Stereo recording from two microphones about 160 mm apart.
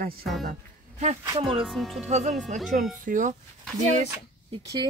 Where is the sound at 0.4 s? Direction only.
55° right (ahead or behind).